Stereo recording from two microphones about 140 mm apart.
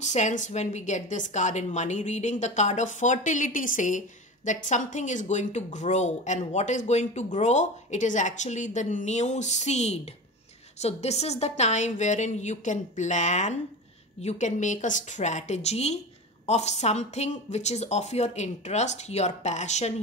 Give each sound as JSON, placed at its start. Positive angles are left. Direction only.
{"t": 0.0, "sound": "a woman's voice", "side_deg": 55}